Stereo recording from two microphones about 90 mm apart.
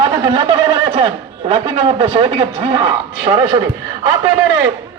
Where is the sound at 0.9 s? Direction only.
70° right (ahead or behind).